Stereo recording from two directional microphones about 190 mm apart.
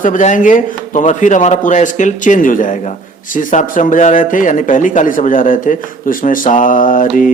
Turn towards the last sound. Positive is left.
turn(degrees=45)  # may be behind; listen again after turning